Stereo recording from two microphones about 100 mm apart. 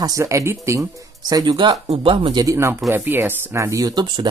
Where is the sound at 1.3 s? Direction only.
45° right (ahead or behind).